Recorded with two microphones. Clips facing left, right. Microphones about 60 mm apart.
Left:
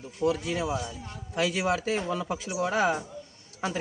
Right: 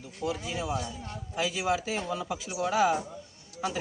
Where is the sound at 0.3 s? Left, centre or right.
Left.